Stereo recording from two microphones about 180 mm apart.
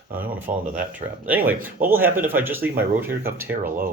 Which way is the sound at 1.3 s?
10° right (ahead or behind).